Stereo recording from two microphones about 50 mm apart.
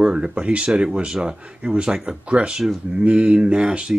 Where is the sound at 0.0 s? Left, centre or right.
Centre.